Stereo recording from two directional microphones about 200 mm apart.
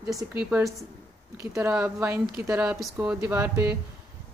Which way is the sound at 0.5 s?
5° right (ahead or behind).